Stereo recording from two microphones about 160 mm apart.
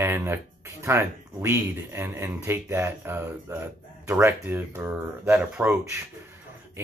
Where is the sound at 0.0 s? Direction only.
15° right (ahead or behind).